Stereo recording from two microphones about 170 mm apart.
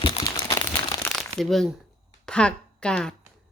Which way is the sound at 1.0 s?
Centre (ahead or behind).